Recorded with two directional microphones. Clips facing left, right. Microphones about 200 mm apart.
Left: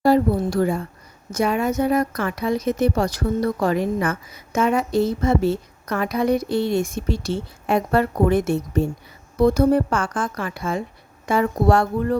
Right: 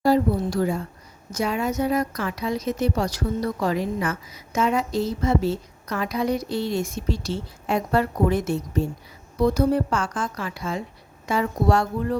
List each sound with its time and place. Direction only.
0.0 s a woman's voice: 60° left (ahead or behind)